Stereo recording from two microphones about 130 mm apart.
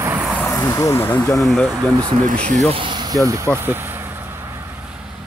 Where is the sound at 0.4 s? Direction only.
20° left (ahead or behind).